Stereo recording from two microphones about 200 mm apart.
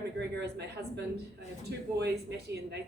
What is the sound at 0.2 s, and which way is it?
Speech, 55° right (ahead or behind).